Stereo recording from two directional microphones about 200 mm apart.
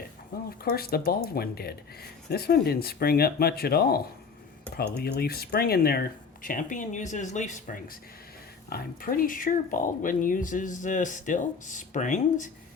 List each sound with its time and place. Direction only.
0.6 s speech: 50° left (ahead or behind)